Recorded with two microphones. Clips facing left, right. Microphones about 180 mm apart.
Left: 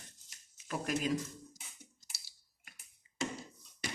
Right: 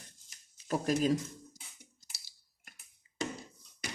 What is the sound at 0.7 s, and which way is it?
Speech, 35° right (ahead or behind).